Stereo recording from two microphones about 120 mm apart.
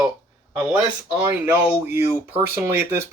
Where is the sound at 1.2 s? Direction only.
20° right (ahead or behind).